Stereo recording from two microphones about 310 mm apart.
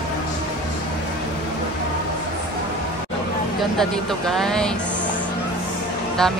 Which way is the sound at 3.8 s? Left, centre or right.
Centre.